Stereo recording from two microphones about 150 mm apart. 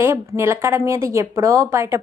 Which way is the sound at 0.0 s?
15° right (ahead or behind).